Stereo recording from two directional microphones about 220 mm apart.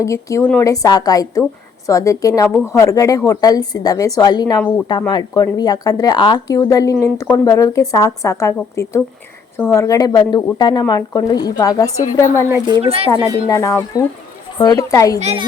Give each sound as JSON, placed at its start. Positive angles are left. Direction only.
{"t": 0.0, "sound": "speech", "side_deg": 15}
{"t": 12.6, "sound": "speech", "side_deg": -25}
{"t": 13.1, "sound": "speech", "side_deg": 15}